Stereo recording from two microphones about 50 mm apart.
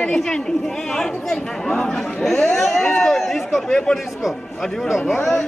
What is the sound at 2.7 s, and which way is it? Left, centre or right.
Speech, centre.